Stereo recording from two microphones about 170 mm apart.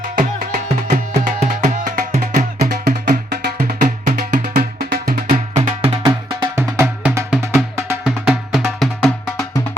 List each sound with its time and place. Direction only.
0.2 s music: 50° right (ahead or behind)
5.5 s music: 40° right (ahead or behind)
6.6 s music: 15° right (ahead or behind)